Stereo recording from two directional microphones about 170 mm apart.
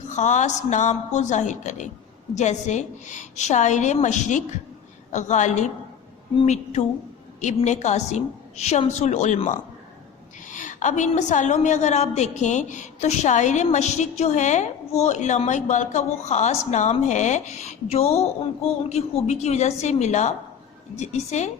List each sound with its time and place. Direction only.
0.1 s a woman's voice: 45° left (ahead or behind)